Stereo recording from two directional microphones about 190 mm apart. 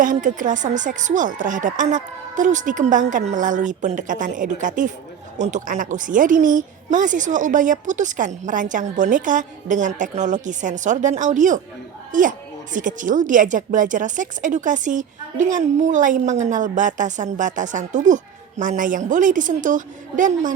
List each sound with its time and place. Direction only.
0.0 s a woman's voice: 45° right (ahead or behind)